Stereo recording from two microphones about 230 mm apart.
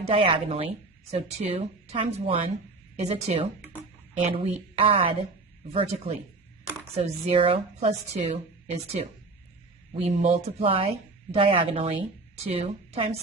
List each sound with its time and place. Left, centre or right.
0.0 s a woman's voice: right